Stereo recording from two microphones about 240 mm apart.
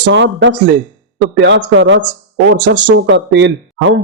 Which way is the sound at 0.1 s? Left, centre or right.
Right.